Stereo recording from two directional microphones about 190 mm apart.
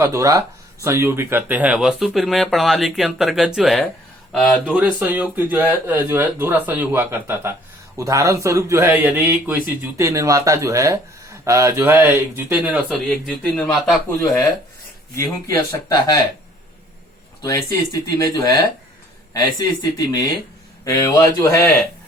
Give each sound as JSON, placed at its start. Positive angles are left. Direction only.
{"t": 0.0, "sound": "speech", "side_deg": -15}
{"t": 4.7, "sound": "a man's voice", "side_deg": -5}
{"t": 15.1, "sound": "speech", "side_deg": 15}
{"t": 17.4, "sound": "speech", "side_deg": 20}
{"t": 20.8, "sound": "speech", "side_deg": 15}